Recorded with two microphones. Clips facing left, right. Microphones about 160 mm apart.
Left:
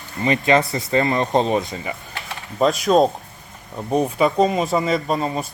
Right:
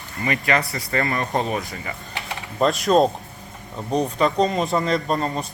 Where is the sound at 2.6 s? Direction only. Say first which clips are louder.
Left 1 dB; centre (ahead or behind).